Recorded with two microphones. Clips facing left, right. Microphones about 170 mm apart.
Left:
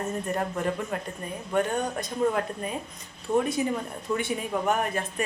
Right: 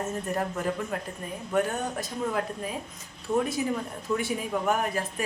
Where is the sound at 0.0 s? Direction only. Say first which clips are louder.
Left 1 dB; centre (ahead or behind).